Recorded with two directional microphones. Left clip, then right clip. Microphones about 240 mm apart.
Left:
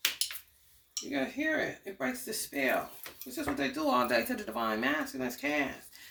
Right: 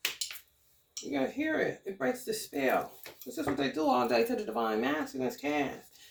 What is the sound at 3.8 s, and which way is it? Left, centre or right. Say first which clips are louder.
Speech: right 1 dB; left.